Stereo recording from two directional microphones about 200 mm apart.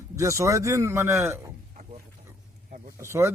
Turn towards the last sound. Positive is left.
turn(degrees=-15)  # may be behind; listen again after turning